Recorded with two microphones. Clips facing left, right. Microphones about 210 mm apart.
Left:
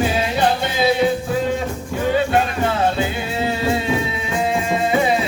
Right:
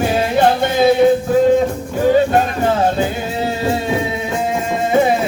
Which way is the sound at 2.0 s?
45° right (ahead or behind).